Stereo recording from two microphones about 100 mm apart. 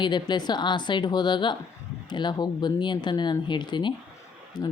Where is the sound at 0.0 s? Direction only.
45° left (ahead or behind).